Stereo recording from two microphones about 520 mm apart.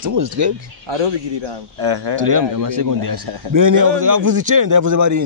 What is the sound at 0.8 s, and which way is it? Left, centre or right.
A man's voice, right.